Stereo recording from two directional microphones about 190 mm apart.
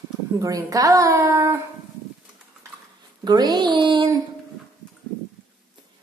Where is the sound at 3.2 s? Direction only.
20° right (ahead or behind).